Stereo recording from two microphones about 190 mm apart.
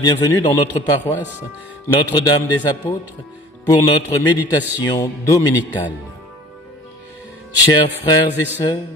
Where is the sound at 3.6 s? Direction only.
20° left (ahead or behind).